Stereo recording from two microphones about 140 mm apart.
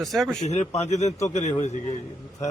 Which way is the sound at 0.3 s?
55° left (ahead or behind).